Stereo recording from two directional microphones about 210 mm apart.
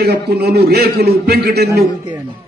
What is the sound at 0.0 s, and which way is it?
A man's voice, 50° right (ahead or behind).